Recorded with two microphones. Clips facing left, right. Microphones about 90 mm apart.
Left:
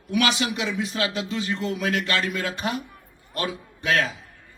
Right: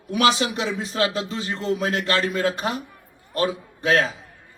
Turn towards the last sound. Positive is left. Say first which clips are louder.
# right 3 dB
turn(degrees=-35)  # may be behind; listen again after turning